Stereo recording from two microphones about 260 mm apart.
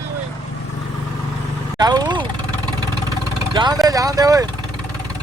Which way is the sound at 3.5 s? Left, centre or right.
Centre.